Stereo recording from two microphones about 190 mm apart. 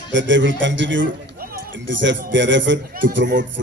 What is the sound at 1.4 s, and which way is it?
Music, 50° right (ahead or behind).